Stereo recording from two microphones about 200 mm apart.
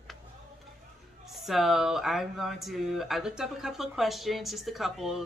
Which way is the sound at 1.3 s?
Centre (ahead or behind).